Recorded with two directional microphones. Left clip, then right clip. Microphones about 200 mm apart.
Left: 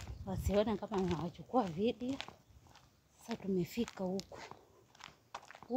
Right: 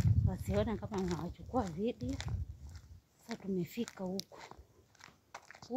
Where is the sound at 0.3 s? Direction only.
10° left (ahead or behind).